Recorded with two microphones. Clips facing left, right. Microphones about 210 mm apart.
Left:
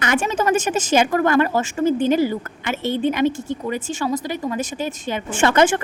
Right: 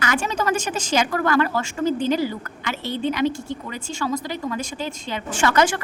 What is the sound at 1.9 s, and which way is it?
A woman's voice, 55° left (ahead or behind).